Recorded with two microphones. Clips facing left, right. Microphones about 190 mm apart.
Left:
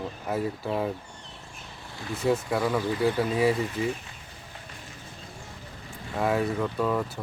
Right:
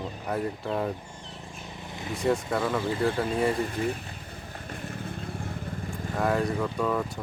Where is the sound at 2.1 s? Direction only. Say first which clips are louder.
Left 1 dB; 5° left (ahead or behind).